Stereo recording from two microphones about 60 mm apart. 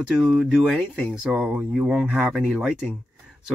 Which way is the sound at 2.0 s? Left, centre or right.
Centre.